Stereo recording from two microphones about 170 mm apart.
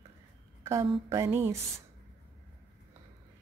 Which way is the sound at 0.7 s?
15° right (ahead or behind).